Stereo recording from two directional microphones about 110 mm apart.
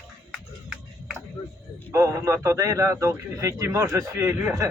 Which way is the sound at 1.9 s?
25° right (ahead or behind).